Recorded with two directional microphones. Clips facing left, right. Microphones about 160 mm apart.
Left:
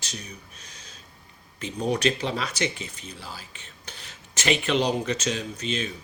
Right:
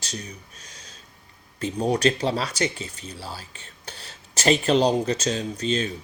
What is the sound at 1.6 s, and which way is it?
Speech, 35° right (ahead or behind).